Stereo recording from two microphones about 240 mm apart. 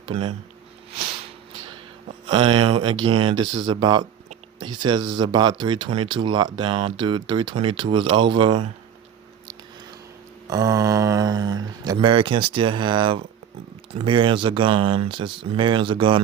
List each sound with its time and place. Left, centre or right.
0.0 s speech: right
2.2 s speech: right
10.4 s speech: centre